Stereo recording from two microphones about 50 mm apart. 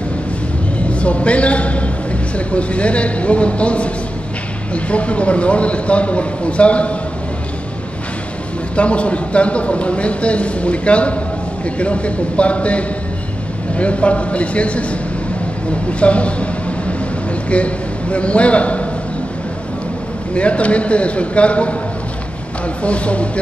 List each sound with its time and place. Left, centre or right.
0.7 s a sound: left
2.3 s a man's voice: left
8.7 s a man's voice: left
16.0 s a sound: left
17.5 s a man's voice: left
20.3 s a man's voice: left
22.8 s a man's voice: left